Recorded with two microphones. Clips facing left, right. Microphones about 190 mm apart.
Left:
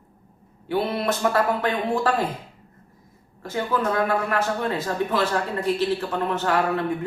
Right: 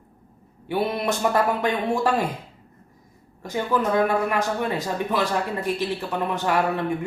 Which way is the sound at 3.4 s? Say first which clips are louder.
Right 1 dB; 15° right (ahead or behind).